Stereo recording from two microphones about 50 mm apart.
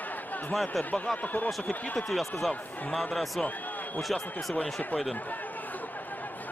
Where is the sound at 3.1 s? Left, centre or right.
Centre.